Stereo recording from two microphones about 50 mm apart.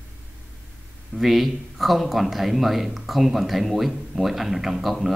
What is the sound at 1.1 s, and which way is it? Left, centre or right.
Speech, centre.